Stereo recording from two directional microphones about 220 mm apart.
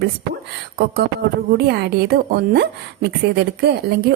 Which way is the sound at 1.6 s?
50° right (ahead or behind).